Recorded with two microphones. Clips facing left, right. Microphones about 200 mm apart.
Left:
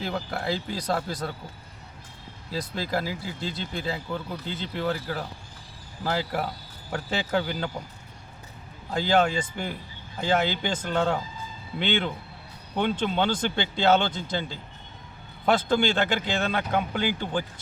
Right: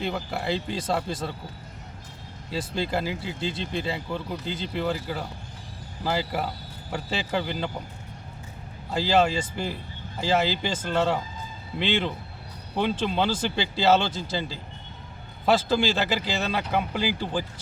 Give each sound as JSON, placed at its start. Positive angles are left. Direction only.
{"t": 0.0, "sound": "speech", "side_deg": -5}
{"t": 2.5, "sound": "speech", "side_deg": 0}
{"t": 8.9, "sound": "speech", "side_deg": -5}